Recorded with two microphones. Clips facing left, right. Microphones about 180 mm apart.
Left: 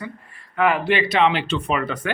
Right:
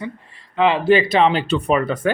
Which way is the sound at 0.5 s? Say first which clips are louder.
Right 3 dB; 25° right (ahead or behind).